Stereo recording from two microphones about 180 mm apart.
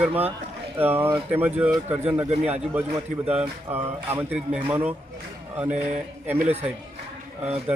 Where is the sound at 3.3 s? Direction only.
10° right (ahead or behind).